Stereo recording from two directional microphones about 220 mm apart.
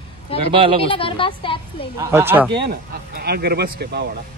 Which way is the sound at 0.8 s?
25° left (ahead or behind).